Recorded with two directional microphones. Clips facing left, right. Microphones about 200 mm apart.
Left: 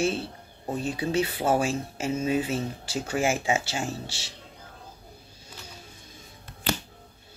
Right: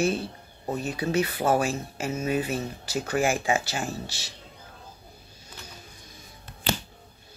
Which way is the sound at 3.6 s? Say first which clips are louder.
Even; 25° left (ahead or behind).